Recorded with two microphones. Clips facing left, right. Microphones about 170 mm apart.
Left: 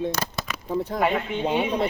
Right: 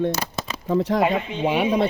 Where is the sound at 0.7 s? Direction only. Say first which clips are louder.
Right 7 dB; 90° right.